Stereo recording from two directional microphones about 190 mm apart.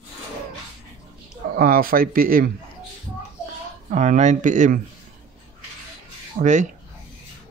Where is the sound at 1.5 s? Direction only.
50° right (ahead or behind).